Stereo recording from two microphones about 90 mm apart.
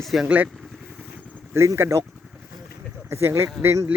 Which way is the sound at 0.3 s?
15° right (ahead or behind).